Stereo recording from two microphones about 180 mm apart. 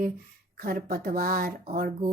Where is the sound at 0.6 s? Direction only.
55° right (ahead or behind).